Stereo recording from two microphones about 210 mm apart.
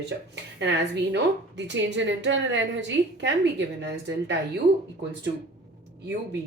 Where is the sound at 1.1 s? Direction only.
60° right (ahead or behind).